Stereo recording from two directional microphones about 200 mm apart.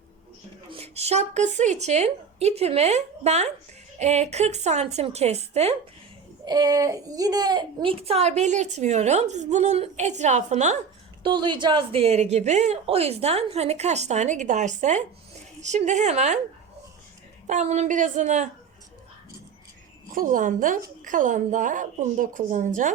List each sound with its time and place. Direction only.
0.7 s a woman's voice: 30° right (ahead or behind)
6.4 s a woman's voice: 20° right (ahead or behind); by 10.8 s 35° right (ahead or behind)
11.2 s a woman's voice: 25° right (ahead or behind)
17.4 s a woman's voice: 35° right (ahead or behind)
20.1 s a woman's voice: 40° right (ahead or behind)